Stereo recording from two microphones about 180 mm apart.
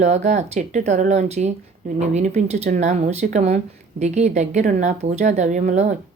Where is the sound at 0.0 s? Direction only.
40° right (ahead or behind).